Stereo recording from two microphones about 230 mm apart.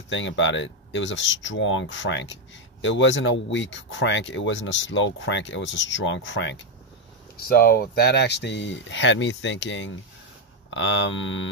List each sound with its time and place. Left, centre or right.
0.1 s speech: left
7.3 s speech: left